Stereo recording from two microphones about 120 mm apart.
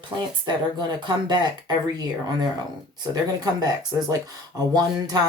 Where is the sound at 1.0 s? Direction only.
35° right (ahead or behind).